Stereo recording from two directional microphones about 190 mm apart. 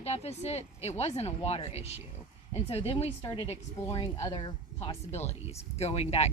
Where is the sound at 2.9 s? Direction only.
25° left (ahead or behind).